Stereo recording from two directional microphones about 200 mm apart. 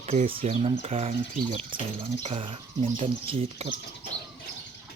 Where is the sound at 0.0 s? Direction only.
35° right (ahead or behind).